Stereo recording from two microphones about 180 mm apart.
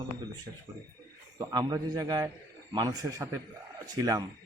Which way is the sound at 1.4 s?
20° right (ahead or behind).